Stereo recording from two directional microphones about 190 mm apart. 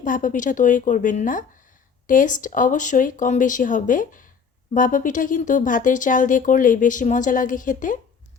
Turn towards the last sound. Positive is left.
turn(degrees=45)  # may be behind; listen again after turning